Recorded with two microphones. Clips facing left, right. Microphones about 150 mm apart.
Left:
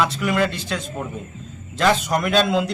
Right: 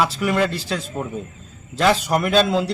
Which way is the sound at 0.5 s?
35° right (ahead or behind).